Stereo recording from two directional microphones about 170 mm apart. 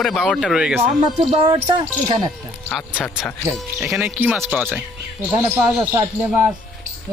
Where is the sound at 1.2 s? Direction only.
35° right (ahead or behind).